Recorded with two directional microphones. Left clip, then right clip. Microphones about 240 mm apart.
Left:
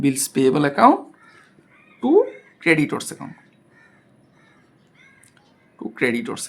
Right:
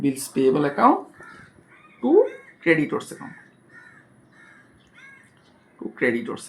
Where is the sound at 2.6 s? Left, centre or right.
Left.